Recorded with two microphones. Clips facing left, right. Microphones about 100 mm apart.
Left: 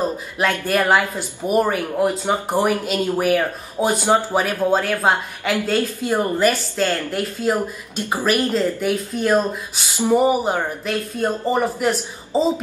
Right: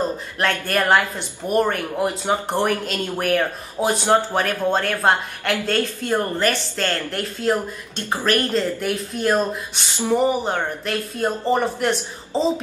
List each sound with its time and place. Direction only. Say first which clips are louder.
0.0 s speech: left 1 dB; 5° left (ahead or behind)
9.9 s speech: left 3 dB; 10° left (ahead or behind)